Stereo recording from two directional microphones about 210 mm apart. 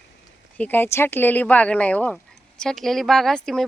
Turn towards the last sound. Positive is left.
turn(degrees=0)  # may be behind; listen again after turning